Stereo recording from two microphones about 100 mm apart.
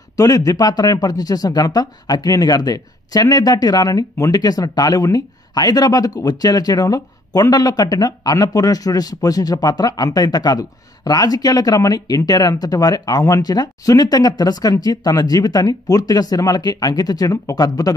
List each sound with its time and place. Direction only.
0.1 s speech: 35° left (ahead or behind)